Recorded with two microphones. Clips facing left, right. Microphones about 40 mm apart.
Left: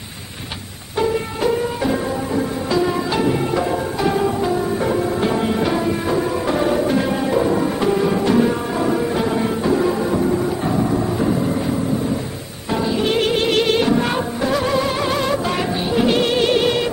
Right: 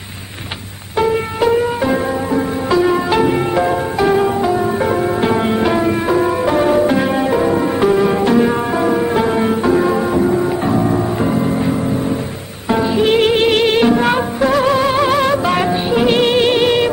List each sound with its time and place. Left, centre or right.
0.9 s music: right
12.6 s music: right